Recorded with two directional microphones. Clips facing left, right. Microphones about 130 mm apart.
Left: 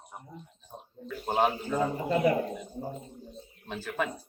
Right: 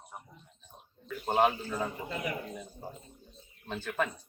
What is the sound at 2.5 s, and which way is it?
A man's voice, 15° left (ahead or behind).